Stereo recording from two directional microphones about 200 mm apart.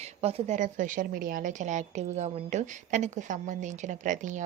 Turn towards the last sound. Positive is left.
turn(degrees=-40)  # may be behind; listen again after turning